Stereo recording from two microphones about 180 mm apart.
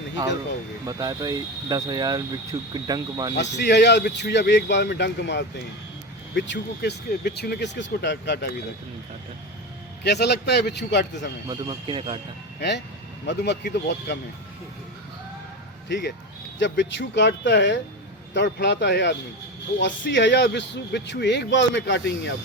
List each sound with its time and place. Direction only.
0.9 s speech: 20° right (ahead or behind)
3.3 s speech: 75° left (ahead or behind)
10.0 s speech: 65° left (ahead or behind)
11.4 s speech: 25° right (ahead or behind)
12.5 s speech: 70° left (ahead or behind)
15.9 s speech: 70° left (ahead or behind)